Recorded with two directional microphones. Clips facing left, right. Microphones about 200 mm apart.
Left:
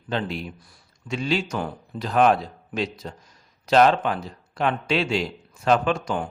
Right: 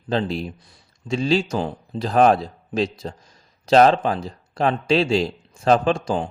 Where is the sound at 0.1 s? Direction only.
35° right (ahead or behind).